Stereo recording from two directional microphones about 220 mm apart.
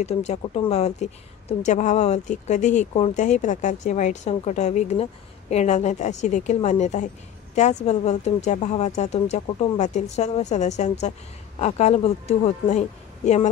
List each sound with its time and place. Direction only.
0.0 s speech: 30° left (ahead or behind)